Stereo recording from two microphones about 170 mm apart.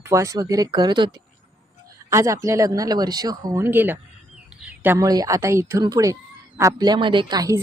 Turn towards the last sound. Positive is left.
turn(degrees=-20)  # may be behind; listen again after turning